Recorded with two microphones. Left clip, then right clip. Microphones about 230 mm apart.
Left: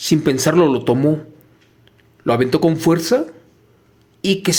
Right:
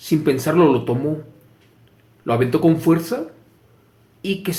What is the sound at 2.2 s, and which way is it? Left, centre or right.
Speech, left.